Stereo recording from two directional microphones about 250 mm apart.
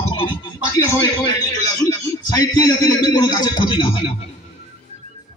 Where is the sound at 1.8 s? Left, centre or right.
Centre.